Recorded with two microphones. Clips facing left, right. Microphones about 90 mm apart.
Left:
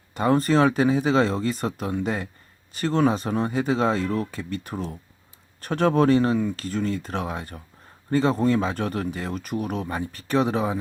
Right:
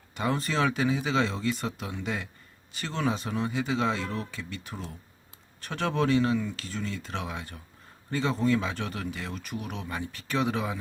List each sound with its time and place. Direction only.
0.1 s speech: 40° left (ahead or behind)